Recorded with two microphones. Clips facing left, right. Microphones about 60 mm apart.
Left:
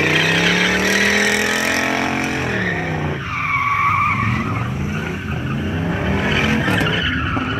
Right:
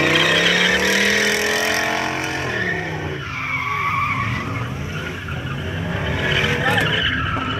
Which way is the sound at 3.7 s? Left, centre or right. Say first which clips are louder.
Left 4 dB; left.